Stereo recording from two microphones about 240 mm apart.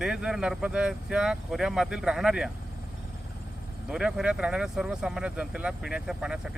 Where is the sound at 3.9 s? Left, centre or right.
Centre.